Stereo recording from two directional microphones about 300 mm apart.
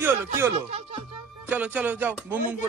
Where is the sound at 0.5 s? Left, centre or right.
Centre.